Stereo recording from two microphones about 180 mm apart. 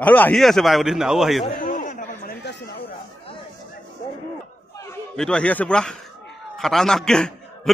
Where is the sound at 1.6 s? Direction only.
50° left (ahead or behind).